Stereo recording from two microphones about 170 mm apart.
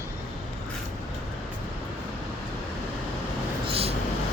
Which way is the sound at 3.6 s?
35° right (ahead or behind).